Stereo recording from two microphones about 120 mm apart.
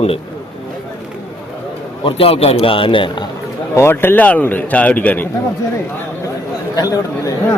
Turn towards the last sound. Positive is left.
turn(degrees=30)  # may be behind; listen again after turning